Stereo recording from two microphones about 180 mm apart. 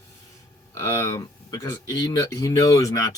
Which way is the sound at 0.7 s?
15° left (ahead or behind).